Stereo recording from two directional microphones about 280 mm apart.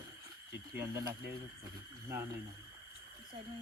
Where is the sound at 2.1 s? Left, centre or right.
Centre.